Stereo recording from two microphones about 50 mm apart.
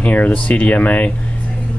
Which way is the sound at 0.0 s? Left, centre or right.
Left.